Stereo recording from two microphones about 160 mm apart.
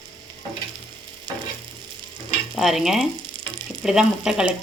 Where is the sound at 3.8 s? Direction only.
5° right (ahead or behind).